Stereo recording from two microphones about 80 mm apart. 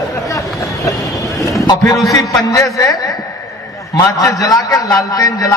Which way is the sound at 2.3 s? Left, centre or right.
Left.